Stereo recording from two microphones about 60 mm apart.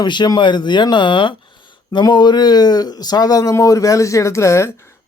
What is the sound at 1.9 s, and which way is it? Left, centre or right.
Speech, left.